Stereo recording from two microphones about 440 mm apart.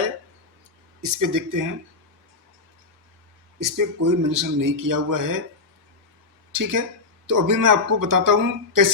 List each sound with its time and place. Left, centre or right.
1.0 s speech: right
3.6 s speech: right
6.5 s speech: right